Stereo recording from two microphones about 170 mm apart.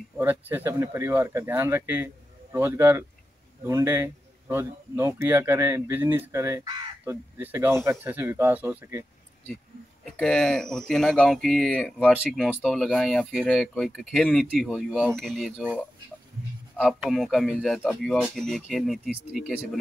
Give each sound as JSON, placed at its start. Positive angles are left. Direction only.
{"t": 0.2, "sound": "speech", "side_deg": -10}
{"t": 7.3, "sound": "speech", "side_deg": -10}
{"t": 10.0, "sound": "speech", "side_deg": 5}
{"t": 16.8, "sound": "speech", "side_deg": 0}